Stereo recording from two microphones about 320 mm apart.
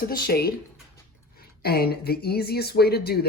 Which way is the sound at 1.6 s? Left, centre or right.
Left.